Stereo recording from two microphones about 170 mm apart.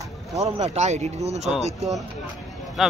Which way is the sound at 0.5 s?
40° right (ahead or behind).